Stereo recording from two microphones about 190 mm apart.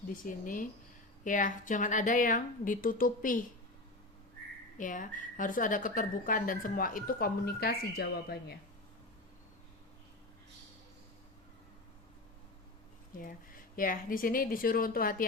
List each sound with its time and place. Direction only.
0.3 s a woman's voice: 45° left (ahead or behind)
4.8 s a woman's voice: 45° left (ahead or behind)
13.7 s a woman's voice: 45° left (ahead or behind)